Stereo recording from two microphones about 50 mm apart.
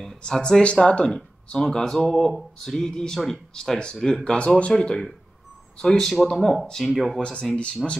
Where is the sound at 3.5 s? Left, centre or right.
Centre.